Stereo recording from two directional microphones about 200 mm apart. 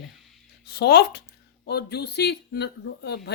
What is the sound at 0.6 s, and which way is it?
Speech, 55° left (ahead or behind).